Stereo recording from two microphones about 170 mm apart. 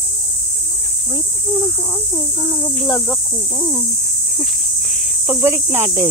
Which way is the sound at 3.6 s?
20° left (ahead or behind).